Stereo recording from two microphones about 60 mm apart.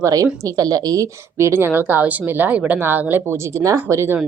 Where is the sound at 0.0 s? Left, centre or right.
Right.